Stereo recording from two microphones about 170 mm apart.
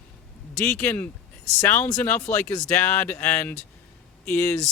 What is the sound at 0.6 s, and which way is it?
Speech, 10° left (ahead or behind).